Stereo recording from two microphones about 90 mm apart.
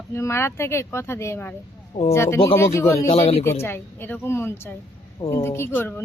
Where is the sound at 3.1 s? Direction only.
90° left.